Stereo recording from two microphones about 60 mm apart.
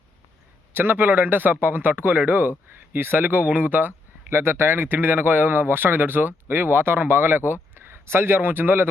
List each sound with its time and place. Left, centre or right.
0.7 s speech: right